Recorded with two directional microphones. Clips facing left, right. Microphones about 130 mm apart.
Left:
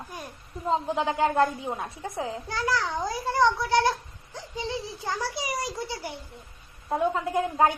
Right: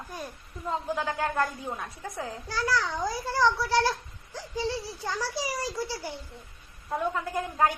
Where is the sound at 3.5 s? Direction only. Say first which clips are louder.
Left 2 dB; 20° left (ahead or behind).